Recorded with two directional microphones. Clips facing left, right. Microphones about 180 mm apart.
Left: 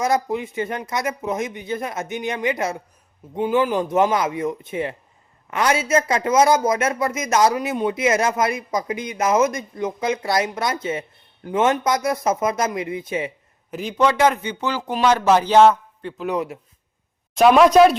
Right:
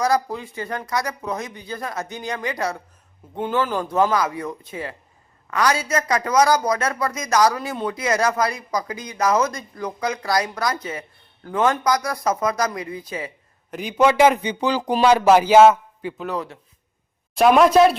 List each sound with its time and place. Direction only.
0.0 s speech: 20° left (ahead or behind)
13.7 s a man's voice: centre (ahead or behind)
13.9 s a man's voice: 10° right (ahead or behind)
17.3 s speech: centre (ahead or behind)